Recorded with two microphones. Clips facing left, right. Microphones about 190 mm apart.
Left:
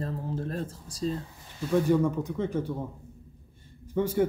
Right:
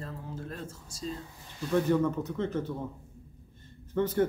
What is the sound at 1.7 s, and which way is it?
Speech, 10° left (ahead or behind).